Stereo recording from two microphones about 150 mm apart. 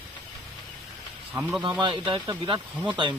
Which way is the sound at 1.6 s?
30° right (ahead or behind).